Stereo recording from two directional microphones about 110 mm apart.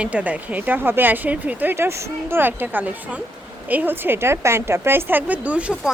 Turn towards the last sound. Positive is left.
turn(degrees=-10)  # may be behind; listen again after turning